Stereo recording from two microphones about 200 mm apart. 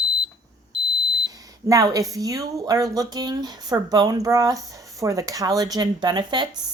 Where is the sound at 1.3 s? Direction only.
20° right (ahead or behind).